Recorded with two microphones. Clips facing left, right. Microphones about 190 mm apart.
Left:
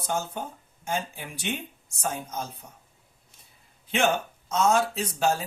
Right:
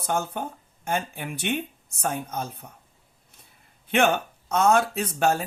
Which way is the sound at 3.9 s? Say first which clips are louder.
Right 3 dB; 60° right (ahead or behind).